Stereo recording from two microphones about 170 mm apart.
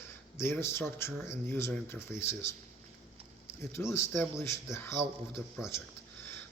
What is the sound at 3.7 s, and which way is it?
Speech, 15° left (ahead or behind).